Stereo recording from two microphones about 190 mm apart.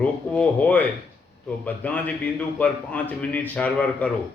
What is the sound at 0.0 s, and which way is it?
A man's voice, 5° left (ahead or behind).